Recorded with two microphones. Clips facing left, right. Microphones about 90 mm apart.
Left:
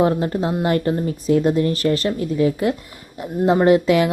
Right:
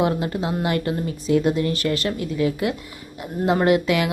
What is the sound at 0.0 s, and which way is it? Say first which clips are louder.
Speech: left 4 dB; 35° left (ahead or behind).